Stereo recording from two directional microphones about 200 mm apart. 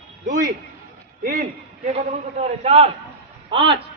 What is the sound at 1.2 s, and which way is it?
A man's voice, 45° right (ahead or behind).